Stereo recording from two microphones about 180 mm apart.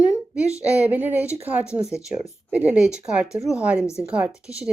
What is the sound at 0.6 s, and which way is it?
Speech, 10° right (ahead or behind).